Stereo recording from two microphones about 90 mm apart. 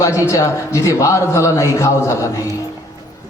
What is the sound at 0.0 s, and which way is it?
A man's voice, 35° left (ahead or behind).